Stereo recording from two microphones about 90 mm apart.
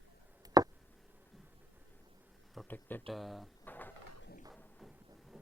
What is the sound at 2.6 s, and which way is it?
Speech, 20° left (ahead or behind).